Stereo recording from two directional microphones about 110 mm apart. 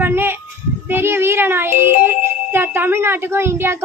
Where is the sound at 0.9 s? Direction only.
20° right (ahead or behind).